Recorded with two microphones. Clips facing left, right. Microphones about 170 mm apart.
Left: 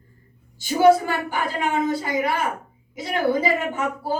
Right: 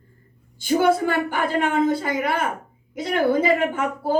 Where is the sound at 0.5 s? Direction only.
55° right (ahead or behind).